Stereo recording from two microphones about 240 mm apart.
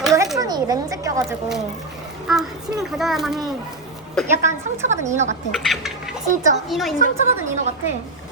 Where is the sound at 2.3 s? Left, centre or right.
Centre.